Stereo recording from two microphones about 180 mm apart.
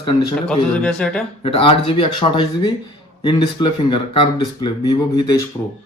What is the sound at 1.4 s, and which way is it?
Speech, 30° left (ahead or behind).